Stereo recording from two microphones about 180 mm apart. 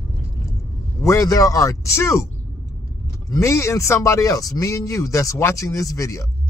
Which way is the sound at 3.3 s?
15° left (ahead or behind).